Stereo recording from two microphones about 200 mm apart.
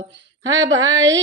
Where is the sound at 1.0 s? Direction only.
65° right (ahead or behind).